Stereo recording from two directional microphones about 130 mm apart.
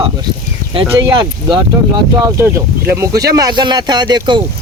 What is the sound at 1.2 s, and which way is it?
Speech, 35° right (ahead or behind).